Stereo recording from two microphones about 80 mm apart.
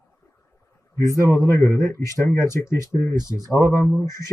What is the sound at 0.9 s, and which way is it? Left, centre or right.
Speech, left.